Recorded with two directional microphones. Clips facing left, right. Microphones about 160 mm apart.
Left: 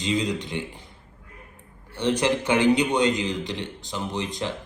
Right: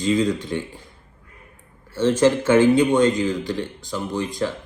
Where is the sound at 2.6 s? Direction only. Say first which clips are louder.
Right 4 dB; 20° left (ahead or behind).